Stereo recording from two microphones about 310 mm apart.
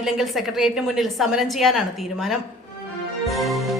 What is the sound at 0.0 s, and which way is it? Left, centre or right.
A woman's voice, centre.